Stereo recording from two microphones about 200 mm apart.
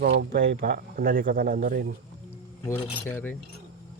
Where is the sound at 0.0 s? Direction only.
60° right (ahead or behind).